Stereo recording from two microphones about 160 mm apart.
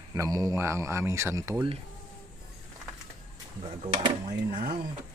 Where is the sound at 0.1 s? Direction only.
20° right (ahead or behind).